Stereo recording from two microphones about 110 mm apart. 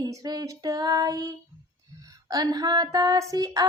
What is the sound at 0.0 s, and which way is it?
Female singing, 35° right (ahead or behind).